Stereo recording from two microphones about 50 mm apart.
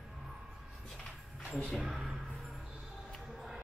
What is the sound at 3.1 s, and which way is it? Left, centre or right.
Music, centre.